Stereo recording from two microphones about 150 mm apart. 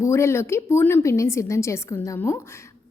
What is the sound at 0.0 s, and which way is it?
A woman's voice, 20° left (ahead or behind).